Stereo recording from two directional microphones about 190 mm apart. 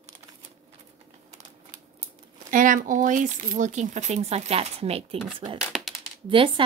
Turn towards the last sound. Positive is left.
turn(degrees=-25)  # may be behind; listen again after turning